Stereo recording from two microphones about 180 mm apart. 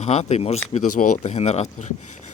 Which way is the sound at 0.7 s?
45° left (ahead or behind).